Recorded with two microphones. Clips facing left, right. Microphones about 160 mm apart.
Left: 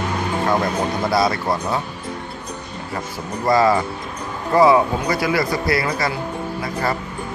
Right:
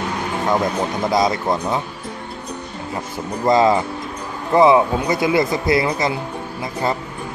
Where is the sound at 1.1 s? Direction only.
20° right (ahead or behind).